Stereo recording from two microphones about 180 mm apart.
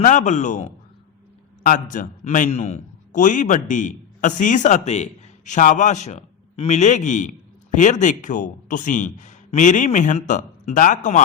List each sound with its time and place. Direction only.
0.0 s a man's voice: 45° left (ahead or behind)
1.6 s a man's voice: 45° left (ahead or behind)